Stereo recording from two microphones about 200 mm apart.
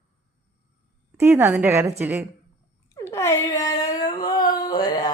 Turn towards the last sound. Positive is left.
turn(degrees=20)  # may be behind; listen again after turning